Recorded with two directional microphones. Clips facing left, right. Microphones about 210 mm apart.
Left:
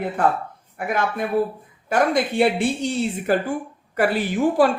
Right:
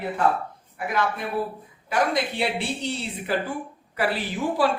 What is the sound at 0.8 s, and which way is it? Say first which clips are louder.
A woman's voice: left 3 dB; 50° left (ahead or behind).